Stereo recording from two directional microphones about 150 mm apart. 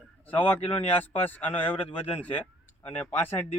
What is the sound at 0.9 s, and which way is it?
Speech, 10° left (ahead or behind).